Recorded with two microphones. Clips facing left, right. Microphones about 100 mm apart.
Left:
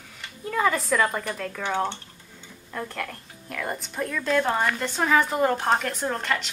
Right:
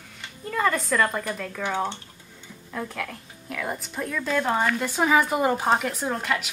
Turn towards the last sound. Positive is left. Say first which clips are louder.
# even
turn(degrees=-5)  # may be behind; listen again after turning